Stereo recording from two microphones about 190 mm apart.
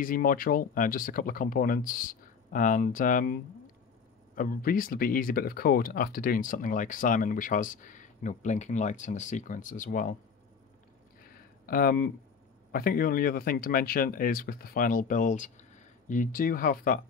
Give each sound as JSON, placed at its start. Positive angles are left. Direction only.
{"t": 0.0, "sound": "speech", "side_deg": 45}
{"t": 4.4, "sound": "speech", "side_deg": 50}
{"t": 11.6, "sound": "speech", "side_deg": 50}